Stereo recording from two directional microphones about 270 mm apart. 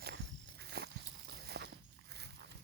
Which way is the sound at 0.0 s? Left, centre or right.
Right.